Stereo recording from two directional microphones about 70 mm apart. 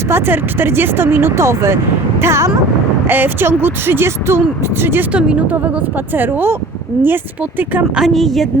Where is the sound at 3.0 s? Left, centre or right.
Right.